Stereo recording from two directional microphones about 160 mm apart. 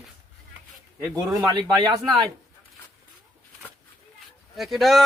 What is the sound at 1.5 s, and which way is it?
Speech, 30° right (ahead or behind).